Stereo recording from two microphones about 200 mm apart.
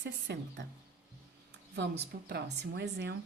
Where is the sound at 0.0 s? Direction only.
60° right (ahead or behind).